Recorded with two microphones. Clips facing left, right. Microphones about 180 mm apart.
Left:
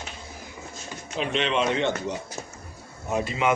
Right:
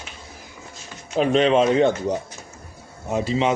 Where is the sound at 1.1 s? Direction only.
40° right (ahead or behind).